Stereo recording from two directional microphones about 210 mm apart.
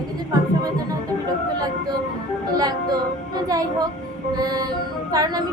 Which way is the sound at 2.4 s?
20° right (ahead or behind).